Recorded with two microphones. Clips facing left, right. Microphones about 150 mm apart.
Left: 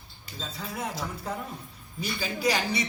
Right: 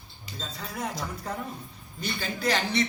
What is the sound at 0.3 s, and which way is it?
A man's voice, centre (ahead or behind).